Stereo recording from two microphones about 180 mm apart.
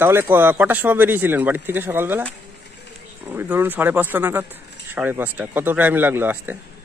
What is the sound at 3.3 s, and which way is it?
Speech, 10° right (ahead or behind).